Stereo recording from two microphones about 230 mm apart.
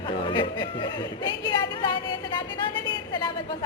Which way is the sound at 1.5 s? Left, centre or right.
Centre.